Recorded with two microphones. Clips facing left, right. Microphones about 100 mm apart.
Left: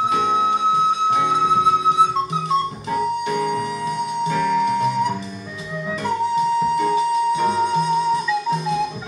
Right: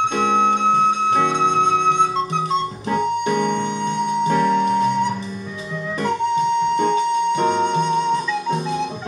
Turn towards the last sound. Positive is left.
turn(degrees=-30)  # may be behind; listen again after turning